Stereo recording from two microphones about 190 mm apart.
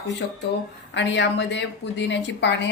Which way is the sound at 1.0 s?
70° left (ahead or behind).